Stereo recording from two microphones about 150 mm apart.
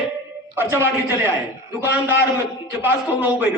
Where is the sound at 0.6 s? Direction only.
15° right (ahead or behind).